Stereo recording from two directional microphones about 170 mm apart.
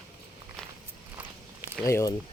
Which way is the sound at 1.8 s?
20° left (ahead or behind).